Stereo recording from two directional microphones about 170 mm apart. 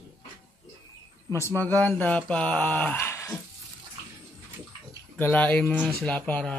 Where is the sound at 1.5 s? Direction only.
10° left (ahead or behind).